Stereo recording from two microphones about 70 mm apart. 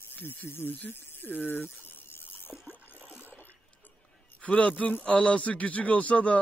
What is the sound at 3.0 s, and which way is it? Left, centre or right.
Toilet flush, right.